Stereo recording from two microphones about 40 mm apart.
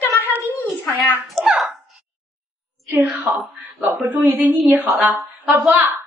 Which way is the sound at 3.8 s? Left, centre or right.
Right.